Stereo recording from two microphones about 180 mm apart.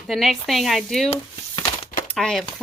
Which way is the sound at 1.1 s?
25° left (ahead or behind).